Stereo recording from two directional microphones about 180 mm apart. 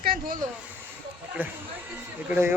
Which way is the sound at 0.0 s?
55° right (ahead or behind).